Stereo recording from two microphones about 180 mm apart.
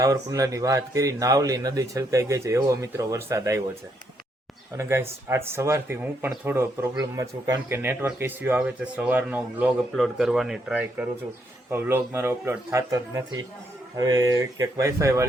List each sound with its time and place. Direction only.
0.0 s a man's voice: 20° right (ahead or behind)
4.8 s a man's voice: 15° right (ahead or behind)